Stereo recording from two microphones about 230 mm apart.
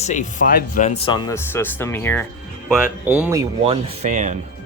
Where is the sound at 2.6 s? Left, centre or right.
Centre.